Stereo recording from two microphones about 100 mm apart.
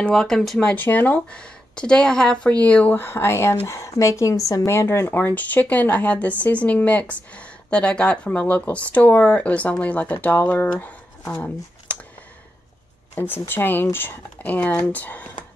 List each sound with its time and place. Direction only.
0.0 s speech: 5° left (ahead or behind)
0.7 s speech: 20° left (ahead or behind)
13.1 s speech: 20° left (ahead or behind)